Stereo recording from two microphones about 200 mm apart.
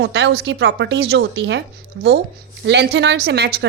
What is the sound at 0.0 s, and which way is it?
A woman's voice, 60° right (ahead or behind).